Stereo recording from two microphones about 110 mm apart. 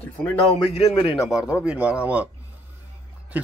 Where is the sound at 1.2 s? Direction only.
5° right (ahead or behind).